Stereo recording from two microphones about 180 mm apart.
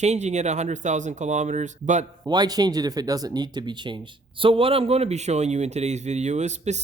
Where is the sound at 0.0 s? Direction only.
40° right (ahead or behind).